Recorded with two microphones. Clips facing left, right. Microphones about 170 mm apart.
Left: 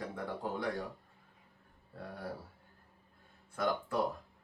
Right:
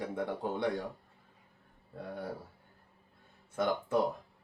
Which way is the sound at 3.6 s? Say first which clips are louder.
Right 2 dB; 25° right (ahead or behind).